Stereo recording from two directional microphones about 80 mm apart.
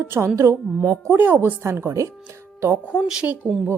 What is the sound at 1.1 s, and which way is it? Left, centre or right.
Speech, right.